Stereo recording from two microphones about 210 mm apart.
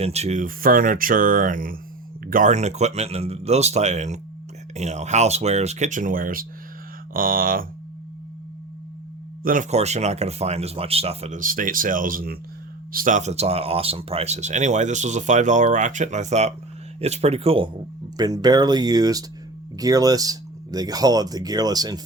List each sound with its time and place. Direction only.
0.0 s speech: 30° right (ahead or behind)
9.4 s speech: 40° right (ahead or behind); by 22.0 s 20° right (ahead or behind)